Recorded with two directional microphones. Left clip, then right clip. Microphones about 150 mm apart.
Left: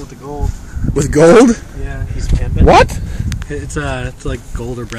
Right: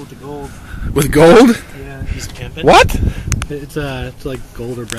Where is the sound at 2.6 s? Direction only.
5° right (ahead or behind).